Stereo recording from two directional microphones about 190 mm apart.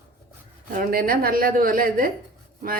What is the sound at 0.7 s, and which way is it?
A woman's voice, 50° right (ahead or behind).